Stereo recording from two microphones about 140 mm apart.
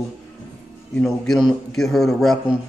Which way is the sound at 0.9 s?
5° left (ahead or behind).